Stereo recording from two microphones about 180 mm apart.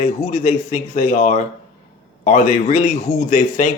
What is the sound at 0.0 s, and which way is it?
A man's voice, 40° left (ahead or behind).